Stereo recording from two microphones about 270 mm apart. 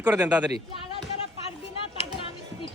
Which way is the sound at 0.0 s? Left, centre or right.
Centre.